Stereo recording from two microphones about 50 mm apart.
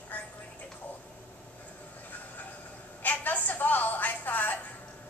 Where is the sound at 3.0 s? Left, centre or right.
Left.